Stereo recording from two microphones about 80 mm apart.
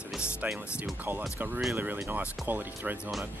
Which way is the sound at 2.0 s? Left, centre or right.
Right.